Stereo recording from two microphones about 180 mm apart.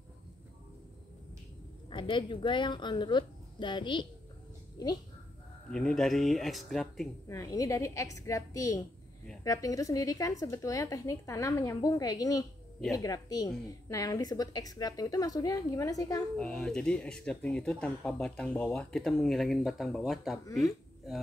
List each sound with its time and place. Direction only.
1.9 s a woman's voice: 25° left (ahead or behind)
5.7 s speech: 5° left (ahead or behind)
7.2 s a woman's voice: 20° left (ahead or behind)
16.3 s speech: 5° left (ahead or behind)